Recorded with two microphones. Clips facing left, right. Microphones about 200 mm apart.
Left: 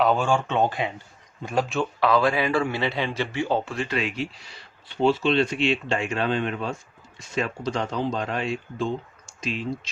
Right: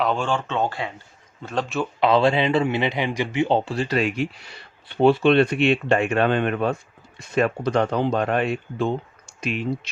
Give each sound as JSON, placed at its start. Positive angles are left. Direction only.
{"t": 0.0, "sound": "speech", "side_deg": 5}
{"t": 2.0, "sound": "speech", "side_deg": -25}